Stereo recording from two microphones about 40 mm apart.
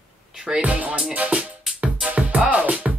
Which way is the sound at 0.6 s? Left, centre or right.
Right.